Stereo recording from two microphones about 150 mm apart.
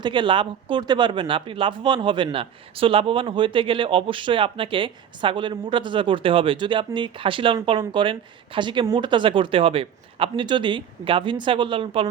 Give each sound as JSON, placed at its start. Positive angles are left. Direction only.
{"t": 0.0, "sound": "speech", "side_deg": -30}